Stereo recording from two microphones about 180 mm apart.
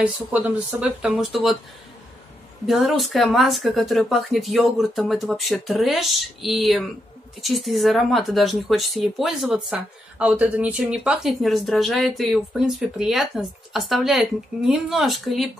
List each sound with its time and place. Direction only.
0.0 s speech: 5° right (ahead or behind)
2.6 s speech: centre (ahead or behind)